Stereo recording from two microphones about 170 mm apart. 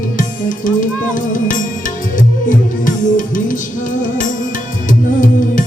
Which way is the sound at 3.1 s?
50° left (ahead or behind).